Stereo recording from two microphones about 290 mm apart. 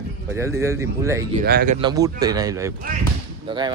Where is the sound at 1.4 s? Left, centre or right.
Right.